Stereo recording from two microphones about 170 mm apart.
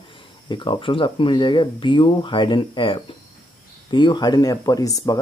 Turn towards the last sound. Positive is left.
turn(degrees=20)  # may be behind; listen again after turning